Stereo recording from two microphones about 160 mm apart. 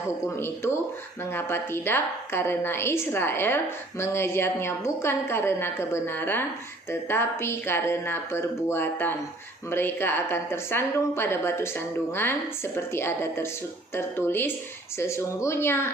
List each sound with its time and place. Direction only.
0.3 s a woman's voice: 15° left (ahead or behind)